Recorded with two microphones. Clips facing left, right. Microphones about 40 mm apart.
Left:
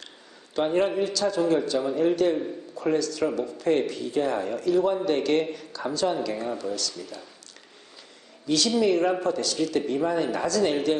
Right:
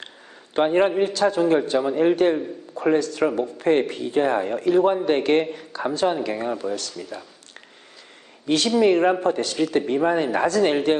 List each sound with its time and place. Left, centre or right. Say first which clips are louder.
0.5 s a man's voice: right 5 dB; right
8.4 s a man's voice: right 4 dB; right